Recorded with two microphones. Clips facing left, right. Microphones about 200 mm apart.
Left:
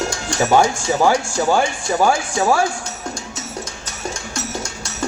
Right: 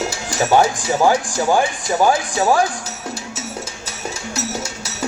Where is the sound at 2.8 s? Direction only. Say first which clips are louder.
Even; 5° right (ahead or behind).